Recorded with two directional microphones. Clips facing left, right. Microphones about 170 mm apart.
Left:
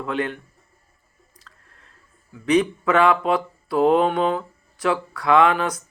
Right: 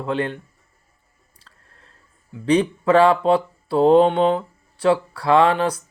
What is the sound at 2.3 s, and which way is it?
Speech, 30° right (ahead or behind).